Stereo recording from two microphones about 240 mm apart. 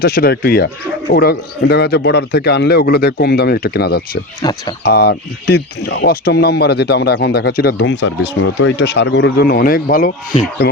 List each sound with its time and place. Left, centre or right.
0.0 s speech: left
4.4 s speech: centre
4.8 s speech: left